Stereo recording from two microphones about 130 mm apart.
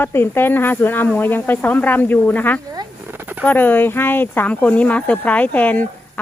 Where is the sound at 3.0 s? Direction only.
15° right (ahead or behind).